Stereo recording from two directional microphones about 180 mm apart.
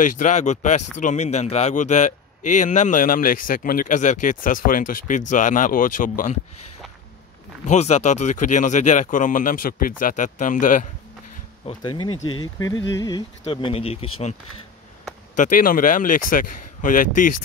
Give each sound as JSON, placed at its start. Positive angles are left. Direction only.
{"t": 0.0, "sound": "speech", "side_deg": 45}
{"t": 7.6, "sound": "speech", "side_deg": 40}
{"t": 11.6, "sound": "a sound", "side_deg": 25}
{"t": 13.5, "sound": "speech", "side_deg": 30}
{"t": 15.3, "sound": "speech", "side_deg": 45}